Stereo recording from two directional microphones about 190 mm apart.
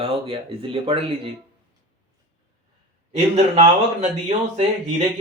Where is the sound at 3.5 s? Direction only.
35° right (ahead or behind).